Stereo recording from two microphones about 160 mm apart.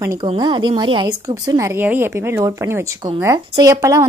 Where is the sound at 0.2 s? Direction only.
30° right (ahead or behind).